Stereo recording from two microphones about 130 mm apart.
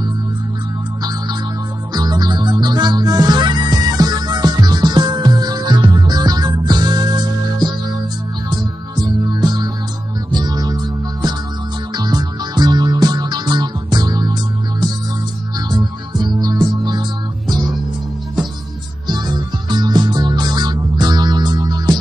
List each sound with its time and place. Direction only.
2.0 s music: 30° right (ahead or behind)
11.9 s music: 30° right (ahead or behind)
15.7 s music: 35° right (ahead or behind)
19.0 s music: 35° right (ahead or behind)